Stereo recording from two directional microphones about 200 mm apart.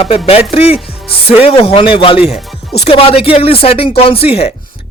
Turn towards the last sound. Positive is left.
turn(degrees=30)  # may be behind; listen again after turning